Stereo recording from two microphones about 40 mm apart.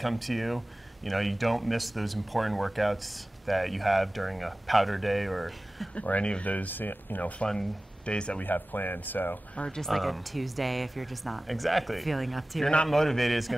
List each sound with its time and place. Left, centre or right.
0.0 s speech: centre
5.9 s speech: left
6.7 s speech: left
8.0 s speech: left
8.4 s speech: left
9.7 s speech: centre